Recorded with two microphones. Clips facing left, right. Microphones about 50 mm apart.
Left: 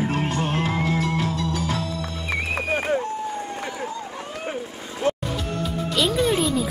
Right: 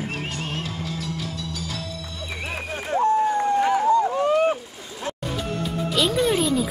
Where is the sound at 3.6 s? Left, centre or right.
Right.